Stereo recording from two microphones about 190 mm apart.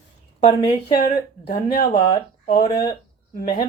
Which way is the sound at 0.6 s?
30° left (ahead or behind).